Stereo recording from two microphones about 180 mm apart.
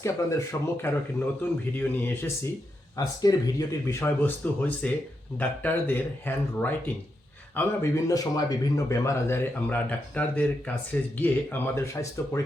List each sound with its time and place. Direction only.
0.0 s speech: 15° left (ahead or behind)